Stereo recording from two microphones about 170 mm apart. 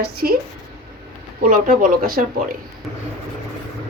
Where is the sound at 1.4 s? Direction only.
55° right (ahead or behind).